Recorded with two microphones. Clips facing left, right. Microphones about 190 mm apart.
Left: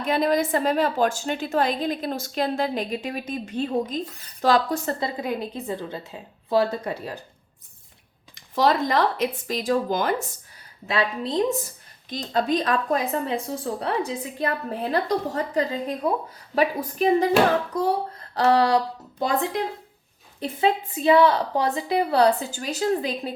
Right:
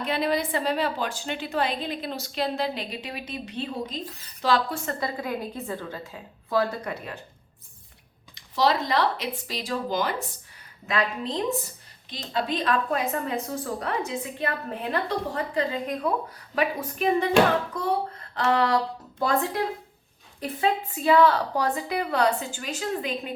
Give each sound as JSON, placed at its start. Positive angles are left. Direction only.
{"t": 0.0, "sound": "a woman's voice", "side_deg": 45}
{"t": 4.9, "sound": "a woman's voice", "side_deg": 25}
{"t": 8.4, "sound": "a woman's voice", "side_deg": 50}
{"t": 10.8, "sound": "a woman's voice", "side_deg": 35}
{"t": 13.2, "sound": "a woman's voice", "side_deg": 30}
{"t": 19.2, "sound": "a woman's voice", "side_deg": 20}